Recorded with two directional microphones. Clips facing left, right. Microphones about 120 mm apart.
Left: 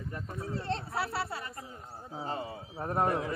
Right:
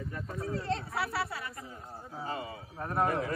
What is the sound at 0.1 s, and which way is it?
Speech, 25° left (ahead or behind).